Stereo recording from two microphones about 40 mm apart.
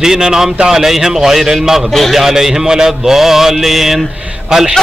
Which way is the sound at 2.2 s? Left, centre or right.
Centre.